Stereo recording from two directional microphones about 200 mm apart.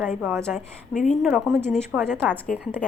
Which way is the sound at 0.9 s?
40° left (ahead or behind).